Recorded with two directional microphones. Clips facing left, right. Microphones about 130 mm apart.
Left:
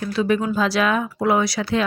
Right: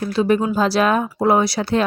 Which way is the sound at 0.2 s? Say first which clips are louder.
Right 3 dB; 35° right (ahead or behind).